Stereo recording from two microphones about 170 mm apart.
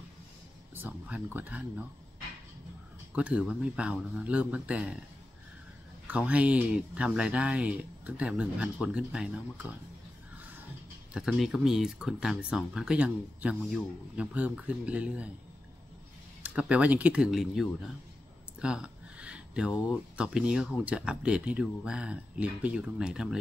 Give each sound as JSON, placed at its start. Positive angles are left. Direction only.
{"t": 0.7, "sound": "speech", "side_deg": -10}
{"t": 3.2, "sound": "speech", "side_deg": -5}
{"t": 6.0, "sound": "speech", "side_deg": -5}
{"t": 11.1, "sound": "speech", "side_deg": -5}
{"t": 16.4, "sound": "speech", "side_deg": -5}
{"t": 18.6, "sound": "a sound", "side_deg": -5}
{"t": 20.2, "sound": "speech", "side_deg": -5}